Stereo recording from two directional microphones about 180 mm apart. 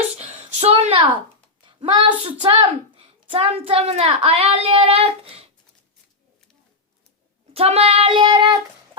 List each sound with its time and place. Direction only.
0.2 s a sound: 35° right (ahead or behind)
2.2 s a child's voice: 25° right (ahead or behind)
7.5 s child singing: 35° right (ahead or behind)